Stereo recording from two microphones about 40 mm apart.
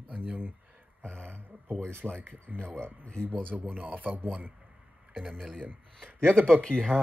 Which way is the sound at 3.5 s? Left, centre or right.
Right.